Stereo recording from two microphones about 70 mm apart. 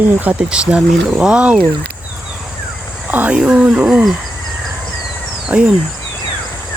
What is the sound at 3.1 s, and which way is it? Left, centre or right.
Speech, right.